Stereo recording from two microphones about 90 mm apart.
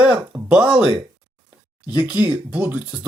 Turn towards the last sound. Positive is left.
turn(degrees=-15)  # may be behind; listen again after turning